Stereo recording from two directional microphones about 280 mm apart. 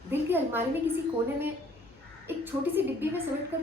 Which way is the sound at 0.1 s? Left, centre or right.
Centre.